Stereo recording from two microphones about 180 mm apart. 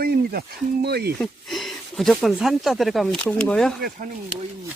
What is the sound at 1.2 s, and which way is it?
Speech, centre (ahead or behind).